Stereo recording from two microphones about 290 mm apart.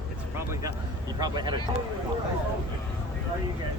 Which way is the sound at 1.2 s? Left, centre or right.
Centre.